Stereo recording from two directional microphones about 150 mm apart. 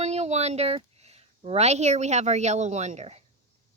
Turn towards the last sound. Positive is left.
turn(degrees=-45)  # may be behind; listen again after turning